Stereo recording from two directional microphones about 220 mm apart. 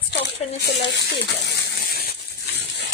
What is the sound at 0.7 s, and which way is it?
Speech, 50° left (ahead or behind).